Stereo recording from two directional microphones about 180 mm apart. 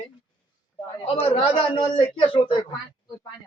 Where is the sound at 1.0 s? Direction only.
35° left (ahead or behind).